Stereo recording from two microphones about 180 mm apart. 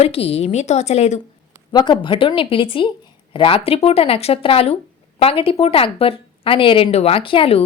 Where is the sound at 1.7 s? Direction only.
25° left (ahead or behind).